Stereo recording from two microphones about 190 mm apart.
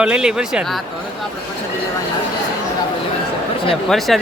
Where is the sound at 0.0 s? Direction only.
5° right (ahead or behind).